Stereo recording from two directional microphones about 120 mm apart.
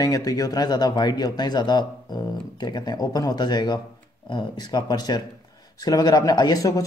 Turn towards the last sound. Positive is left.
turn(degrees=30)  # may be behind; listen again after turning